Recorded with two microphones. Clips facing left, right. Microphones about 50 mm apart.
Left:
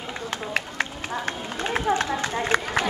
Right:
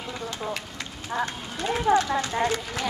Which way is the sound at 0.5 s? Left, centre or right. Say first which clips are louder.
Left 6 dB; left.